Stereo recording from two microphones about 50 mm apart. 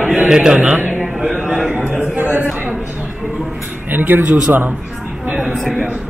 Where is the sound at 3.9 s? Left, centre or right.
Right.